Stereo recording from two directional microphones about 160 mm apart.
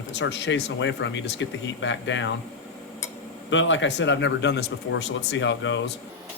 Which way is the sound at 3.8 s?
90° left.